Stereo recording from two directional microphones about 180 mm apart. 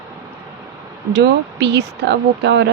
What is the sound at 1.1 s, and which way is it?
Speech, 70° right (ahead or behind).